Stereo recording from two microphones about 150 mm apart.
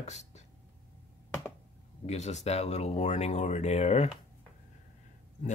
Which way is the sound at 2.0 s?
45° left (ahead or behind).